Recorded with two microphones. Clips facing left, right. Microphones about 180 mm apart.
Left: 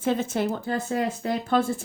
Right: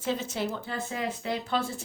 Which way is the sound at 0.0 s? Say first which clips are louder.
Left 6 dB; 55° left (ahead or behind).